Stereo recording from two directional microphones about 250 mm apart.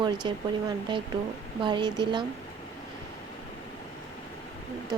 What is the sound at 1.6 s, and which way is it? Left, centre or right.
Speech, centre.